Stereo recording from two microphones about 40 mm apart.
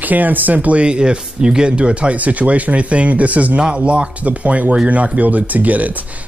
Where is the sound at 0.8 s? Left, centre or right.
Right.